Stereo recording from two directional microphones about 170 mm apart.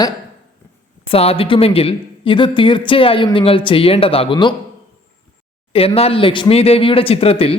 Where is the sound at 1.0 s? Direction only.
35° left (ahead or behind).